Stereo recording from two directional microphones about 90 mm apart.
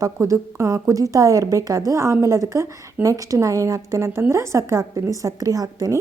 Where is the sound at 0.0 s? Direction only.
35° right (ahead or behind).